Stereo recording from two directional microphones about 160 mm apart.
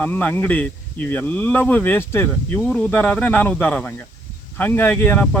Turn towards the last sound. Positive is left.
turn(degrees=10)  # may be behind; listen again after turning